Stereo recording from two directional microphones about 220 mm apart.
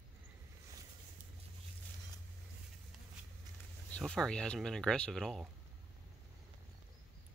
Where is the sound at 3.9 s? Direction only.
5° left (ahead or behind).